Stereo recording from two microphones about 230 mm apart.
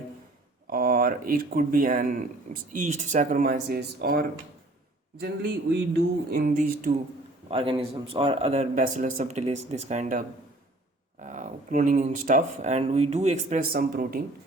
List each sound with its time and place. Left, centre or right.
0.7 s speech: right
7.5 s a man's voice: right